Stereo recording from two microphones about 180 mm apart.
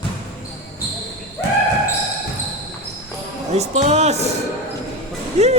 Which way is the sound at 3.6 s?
35° right (ahead or behind).